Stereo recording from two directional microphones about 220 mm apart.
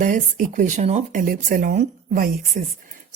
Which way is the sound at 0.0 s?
35° right (ahead or behind).